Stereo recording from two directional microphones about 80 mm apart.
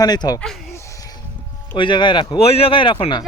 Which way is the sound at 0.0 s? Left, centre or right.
Left.